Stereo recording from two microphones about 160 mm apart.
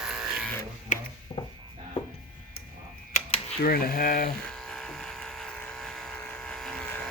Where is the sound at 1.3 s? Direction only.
30° left (ahead or behind).